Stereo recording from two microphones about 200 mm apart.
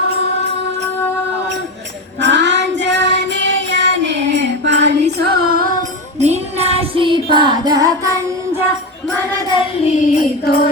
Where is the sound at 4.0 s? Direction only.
65° right (ahead or behind).